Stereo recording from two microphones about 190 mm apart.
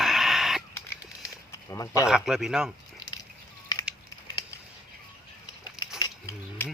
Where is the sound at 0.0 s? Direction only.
Centre (ahead or behind).